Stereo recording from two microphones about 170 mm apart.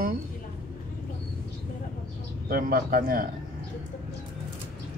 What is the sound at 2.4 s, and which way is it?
Speech, 55° right (ahead or behind).